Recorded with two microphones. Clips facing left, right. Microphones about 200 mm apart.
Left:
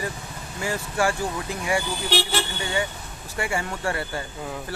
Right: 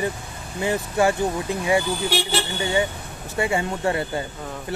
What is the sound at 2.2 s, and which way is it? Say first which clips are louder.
Speech: right 3 dB; 25° right (ahead or behind).